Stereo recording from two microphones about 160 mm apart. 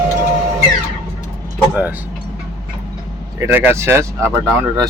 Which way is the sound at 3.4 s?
10° right (ahead or behind).